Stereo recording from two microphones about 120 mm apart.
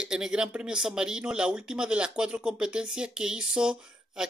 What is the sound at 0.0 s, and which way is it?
Speech, 5° right (ahead or behind).